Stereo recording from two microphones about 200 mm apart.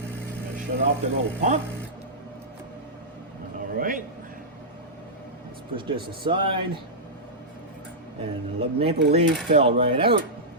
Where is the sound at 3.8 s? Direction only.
40° right (ahead or behind).